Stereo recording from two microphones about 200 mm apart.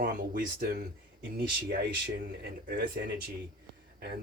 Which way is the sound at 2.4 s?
50° right (ahead or behind).